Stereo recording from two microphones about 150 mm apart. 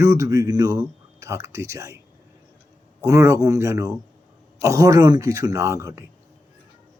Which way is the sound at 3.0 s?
20° right (ahead or behind).